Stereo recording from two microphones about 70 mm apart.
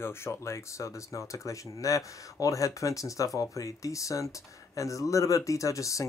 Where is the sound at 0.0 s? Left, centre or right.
Left.